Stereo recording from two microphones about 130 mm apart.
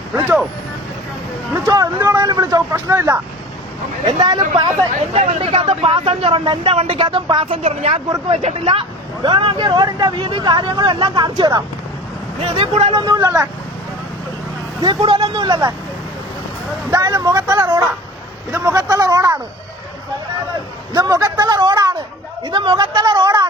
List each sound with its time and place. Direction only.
0.1 s speech: 15° right (ahead or behind)
1.6 s speech: 25° right (ahead or behind)
4.2 s speech: 35° right (ahead or behind)
5.1 s speech: 55° right (ahead or behind); by 11.6 s 30° right (ahead or behind)
12.4 s speech: 45° right (ahead or behind)
12.9 s speech: 30° right (ahead or behind)
14.8 s speech: 35° right (ahead or behind)
16.9 s speech: 30° right (ahead or behind)
20.9 s a sound: 30° right (ahead or behind)
22.4 s speech: 35° right (ahead or behind)